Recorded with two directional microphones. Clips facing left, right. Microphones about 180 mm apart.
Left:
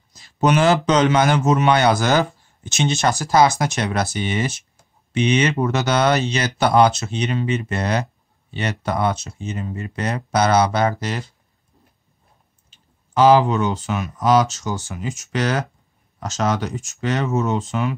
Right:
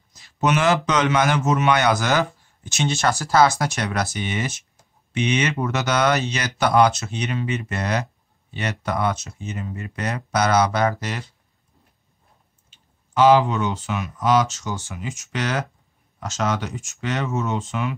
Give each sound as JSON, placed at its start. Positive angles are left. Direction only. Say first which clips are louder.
{"t": 0.2, "sound": "a sound", "louder": "left 3 dB", "side_deg": 35}
{"t": 0.8, "sound": "a man's voice", "louder": "left 4 dB", "side_deg": 30}
{"t": 13.1, "sound": "speech", "louder": "left 2 dB", "side_deg": 35}